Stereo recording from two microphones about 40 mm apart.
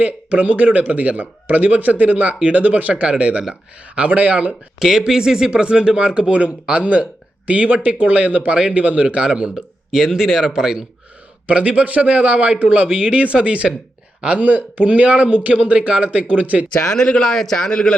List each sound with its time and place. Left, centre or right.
0.0 s speech: right
4.8 s speech: centre
9.6 s speech: centre
11.4 s speech: right
14.3 s speech: right
16.8 s speech: centre
17.7 s a man's voice: left